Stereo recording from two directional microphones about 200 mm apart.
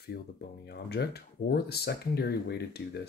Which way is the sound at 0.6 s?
55° left (ahead or behind).